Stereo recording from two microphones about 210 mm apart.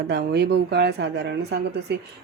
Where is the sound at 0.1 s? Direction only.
50° right (ahead or behind).